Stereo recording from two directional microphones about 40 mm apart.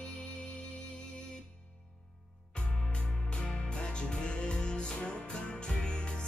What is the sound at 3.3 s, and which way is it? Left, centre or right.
Music, left.